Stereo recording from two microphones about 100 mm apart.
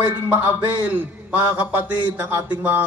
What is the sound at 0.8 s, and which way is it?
A man's voice, 15° right (ahead or behind).